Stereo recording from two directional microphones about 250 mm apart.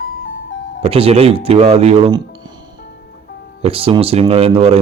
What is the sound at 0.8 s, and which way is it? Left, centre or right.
Speech, right.